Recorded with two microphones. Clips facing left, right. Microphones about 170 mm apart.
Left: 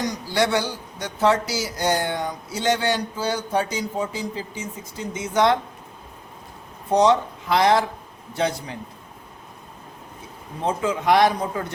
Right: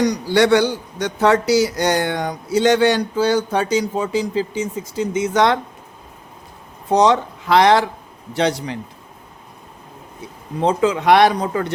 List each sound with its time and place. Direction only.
0.0 s a man's voice: 70° right (ahead or behind)
6.9 s speech: 90° right
10.6 s speech: 85° right